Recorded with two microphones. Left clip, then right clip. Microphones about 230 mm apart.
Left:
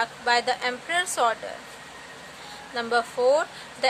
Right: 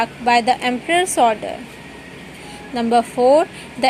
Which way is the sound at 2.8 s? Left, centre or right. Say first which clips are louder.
Right 8 dB; centre.